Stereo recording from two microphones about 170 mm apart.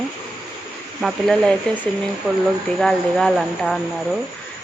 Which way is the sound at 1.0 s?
Centre (ahead or behind).